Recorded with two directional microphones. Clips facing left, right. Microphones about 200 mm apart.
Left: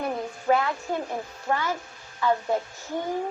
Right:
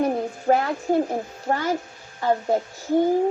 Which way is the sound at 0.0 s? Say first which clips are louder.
Right 6 dB; 40° right (ahead or behind).